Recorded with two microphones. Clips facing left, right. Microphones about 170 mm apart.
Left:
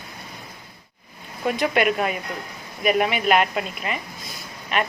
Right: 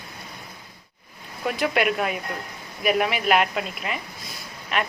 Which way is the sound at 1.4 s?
Centre (ahead or behind).